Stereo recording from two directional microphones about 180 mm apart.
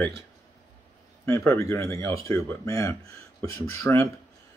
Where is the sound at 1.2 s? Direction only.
15° left (ahead or behind).